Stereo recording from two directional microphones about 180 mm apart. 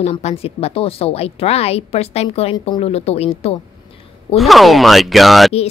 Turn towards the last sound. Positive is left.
turn(degrees=0)  # may be behind; listen again after turning